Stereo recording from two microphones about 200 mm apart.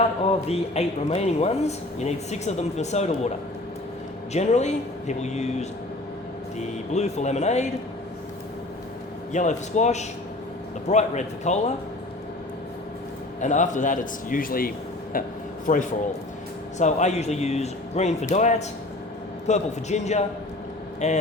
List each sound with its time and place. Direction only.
0.3 s a man's voice: 30° left (ahead or behind)
9.3 s a man's voice: 35° left (ahead or behind)
13.4 s a man's voice: 40° left (ahead or behind)